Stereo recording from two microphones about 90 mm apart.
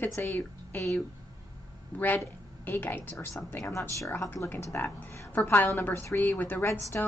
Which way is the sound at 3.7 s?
35° left (ahead or behind).